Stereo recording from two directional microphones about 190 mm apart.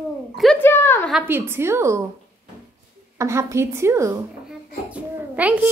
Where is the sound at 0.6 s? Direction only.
10° left (ahead or behind).